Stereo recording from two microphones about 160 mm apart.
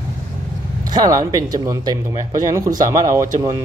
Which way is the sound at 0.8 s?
25° right (ahead or behind).